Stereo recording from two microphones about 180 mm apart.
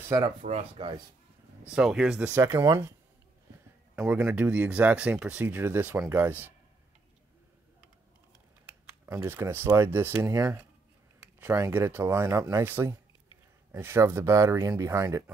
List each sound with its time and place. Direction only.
0.4 s speech: 40° right (ahead or behind)
1.6 s speech: 5° right (ahead or behind)
2.3 s speech: 15° right (ahead or behind)
4.2 s speech: 10° right (ahead or behind)
9.0 s speech: 10° right (ahead or behind)